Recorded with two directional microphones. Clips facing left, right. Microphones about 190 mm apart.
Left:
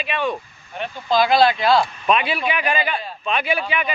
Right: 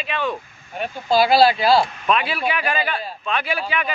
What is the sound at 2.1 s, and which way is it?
Speech, 20° left (ahead or behind).